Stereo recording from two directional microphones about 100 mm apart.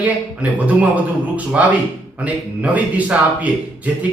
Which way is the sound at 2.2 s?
15° right (ahead or behind).